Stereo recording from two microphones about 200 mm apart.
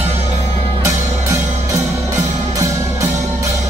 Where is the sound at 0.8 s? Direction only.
15° right (ahead or behind).